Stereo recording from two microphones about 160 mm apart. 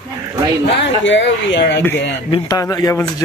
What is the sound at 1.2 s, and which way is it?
Speech, 90° left.